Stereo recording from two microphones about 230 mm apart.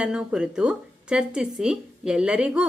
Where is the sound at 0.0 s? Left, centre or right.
Centre.